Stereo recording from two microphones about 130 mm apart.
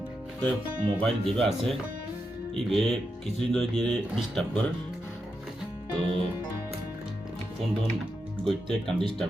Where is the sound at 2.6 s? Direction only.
Centre (ahead or behind).